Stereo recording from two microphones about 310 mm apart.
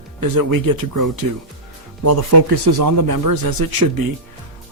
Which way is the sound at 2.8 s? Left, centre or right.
Right.